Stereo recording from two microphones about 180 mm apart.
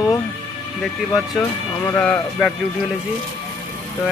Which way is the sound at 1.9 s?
10° left (ahead or behind).